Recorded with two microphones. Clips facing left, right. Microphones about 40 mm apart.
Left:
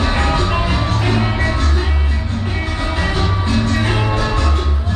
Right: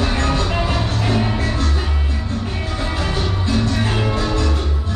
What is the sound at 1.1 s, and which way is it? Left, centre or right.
Music, left.